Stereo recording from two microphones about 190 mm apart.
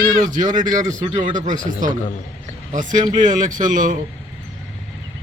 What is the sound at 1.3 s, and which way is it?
Speech, 45° right (ahead or behind).